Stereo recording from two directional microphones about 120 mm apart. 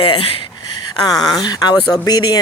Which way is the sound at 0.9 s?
35° left (ahead or behind).